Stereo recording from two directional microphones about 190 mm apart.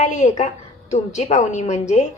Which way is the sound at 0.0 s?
40° left (ahead or behind).